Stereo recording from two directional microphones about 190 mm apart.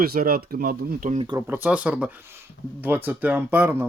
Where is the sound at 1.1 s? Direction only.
25° right (ahead or behind).